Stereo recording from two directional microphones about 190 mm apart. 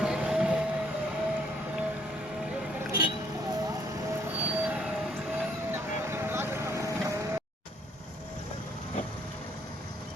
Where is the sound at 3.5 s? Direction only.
20° right (ahead or behind).